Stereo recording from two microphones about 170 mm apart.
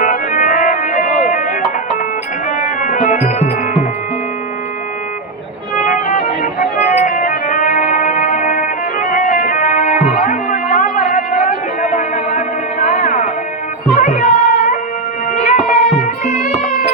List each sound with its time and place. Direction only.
0.0 s music: 50° left (ahead or behind)
5.7 s music: 45° left (ahead or behind)